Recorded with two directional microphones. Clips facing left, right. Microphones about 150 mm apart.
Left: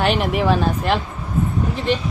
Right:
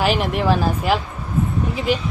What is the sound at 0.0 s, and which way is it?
Speech, centre (ahead or behind).